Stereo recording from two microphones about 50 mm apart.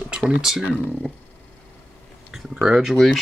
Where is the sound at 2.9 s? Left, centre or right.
Centre.